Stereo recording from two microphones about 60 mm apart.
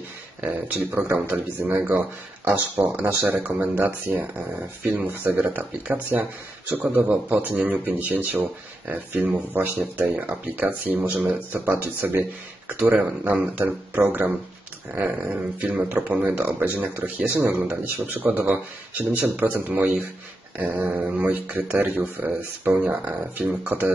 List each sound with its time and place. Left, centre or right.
0.5 s speech: right
3.3 s speech: right
15.2 s speech: right
16.4 s speech: right
23.3 s speech: right